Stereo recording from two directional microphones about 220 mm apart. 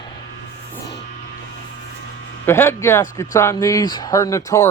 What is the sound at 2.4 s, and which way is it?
Speech, 10° left (ahead or behind).